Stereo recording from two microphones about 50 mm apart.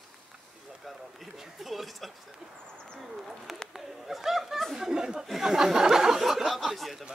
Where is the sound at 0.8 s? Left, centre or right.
Centre.